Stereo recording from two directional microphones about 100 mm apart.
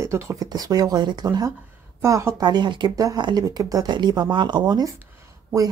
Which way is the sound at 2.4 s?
45° right (ahead or behind).